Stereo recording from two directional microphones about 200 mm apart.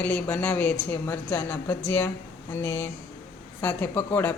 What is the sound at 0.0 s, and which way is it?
Speech, 10° left (ahead or behind).